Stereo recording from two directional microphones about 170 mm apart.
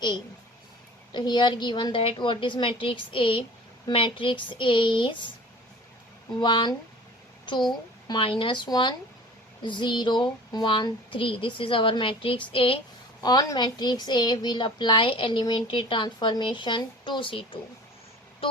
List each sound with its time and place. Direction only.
1.1 s a woman's voice: 25° left (ahead or behind)
6.4 s a woman's voice: 30° left (ahead or behind)
13.2 s a woman's voice: 20° left (ahead or behind)